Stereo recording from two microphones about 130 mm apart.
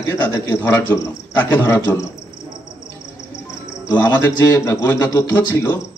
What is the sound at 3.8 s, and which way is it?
A man's voice, 20° left (ahead or behind).